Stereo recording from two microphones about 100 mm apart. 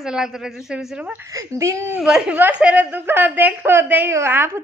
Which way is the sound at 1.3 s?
30° right (ahead or behind).